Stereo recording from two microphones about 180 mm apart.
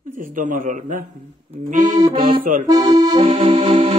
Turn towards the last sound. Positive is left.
turn(degrees=-35)  # may be behind; listen again after turning